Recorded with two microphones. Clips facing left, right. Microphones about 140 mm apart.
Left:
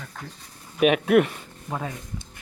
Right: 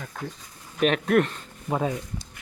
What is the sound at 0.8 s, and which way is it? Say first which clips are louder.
Speech: left 3 dB; 5° left (ahead or behind).